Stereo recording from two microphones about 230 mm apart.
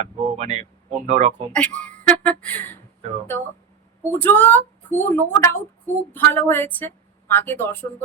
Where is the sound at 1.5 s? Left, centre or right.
Centre.